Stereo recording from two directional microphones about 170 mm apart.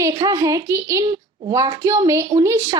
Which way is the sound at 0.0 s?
20° right (ahead or behind).